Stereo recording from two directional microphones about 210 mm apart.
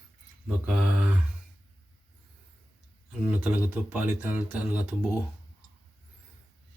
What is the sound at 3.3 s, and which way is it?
Speech, 5° right (ahead or behind).